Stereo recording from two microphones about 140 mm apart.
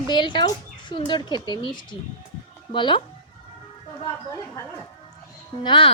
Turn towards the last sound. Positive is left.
turn(degrees=35)  # may be behind; listen again after turning